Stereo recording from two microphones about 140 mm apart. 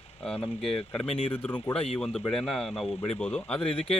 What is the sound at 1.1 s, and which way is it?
Speech, 40° left (ahead or behind).